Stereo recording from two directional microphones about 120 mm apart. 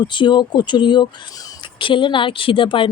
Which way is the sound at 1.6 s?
45° left (ahead or behind).